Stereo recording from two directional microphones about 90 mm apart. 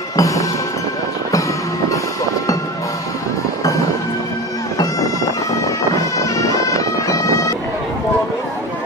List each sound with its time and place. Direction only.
0.1 s music: 40° left (ahead or behind)
6.1 s bagpipes: 35° left (ahead or behind)